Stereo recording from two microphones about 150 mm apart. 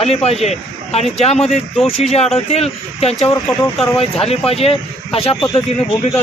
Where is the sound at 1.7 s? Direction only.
Centre (ahead or behind).